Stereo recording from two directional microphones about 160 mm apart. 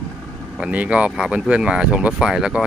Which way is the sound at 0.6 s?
10° right (ahead or behind).